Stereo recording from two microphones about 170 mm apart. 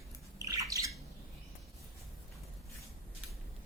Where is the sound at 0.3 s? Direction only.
20° right (ahead or behind).